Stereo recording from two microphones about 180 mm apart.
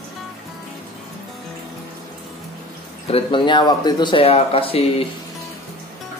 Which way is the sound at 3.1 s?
30° left (ahead or behind).